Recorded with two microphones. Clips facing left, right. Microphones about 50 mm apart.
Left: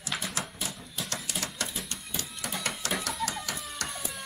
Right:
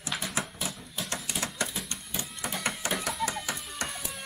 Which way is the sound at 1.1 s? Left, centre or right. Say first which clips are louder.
Right 2 dB; right.